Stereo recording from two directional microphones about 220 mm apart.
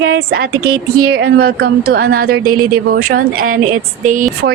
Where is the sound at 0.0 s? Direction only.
50° right (ahead or behind).